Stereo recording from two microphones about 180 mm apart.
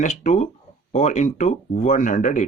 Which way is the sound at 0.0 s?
45° left (ahead or behind).